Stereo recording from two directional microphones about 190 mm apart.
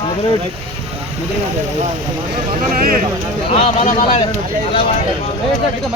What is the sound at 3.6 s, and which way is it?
Speech, 35° left (ahead or behind).